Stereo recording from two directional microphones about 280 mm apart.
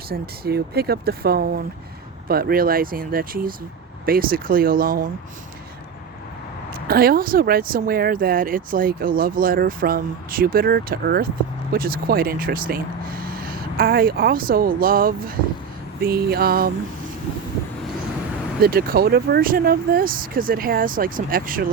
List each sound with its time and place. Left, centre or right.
0.1 s speech: right
6.8 s speech: right
18.6 s speech: right